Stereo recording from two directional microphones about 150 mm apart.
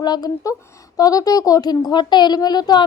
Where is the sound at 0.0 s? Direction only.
25° left (ahead or behind).